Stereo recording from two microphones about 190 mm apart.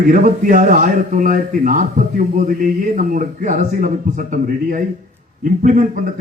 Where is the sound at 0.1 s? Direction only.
40° right (ahead or behind).